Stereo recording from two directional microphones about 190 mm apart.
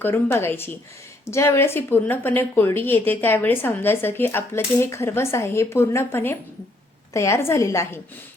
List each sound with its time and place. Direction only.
0.0 s a woman's voice: 10° left (ahead or behind)